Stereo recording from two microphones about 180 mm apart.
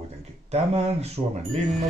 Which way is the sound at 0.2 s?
40° right (ahead or behind).